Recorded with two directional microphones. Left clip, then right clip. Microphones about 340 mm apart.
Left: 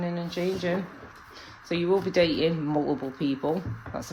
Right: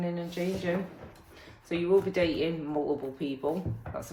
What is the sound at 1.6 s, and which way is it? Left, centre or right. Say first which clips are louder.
Speech: left 1 dB; left.